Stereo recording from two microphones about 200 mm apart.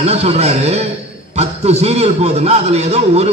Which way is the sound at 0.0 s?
30° right (ahead or behind).